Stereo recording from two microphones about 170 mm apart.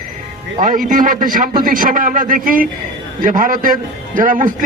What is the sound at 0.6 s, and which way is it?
A man's voice, 50° right (ahead or behind).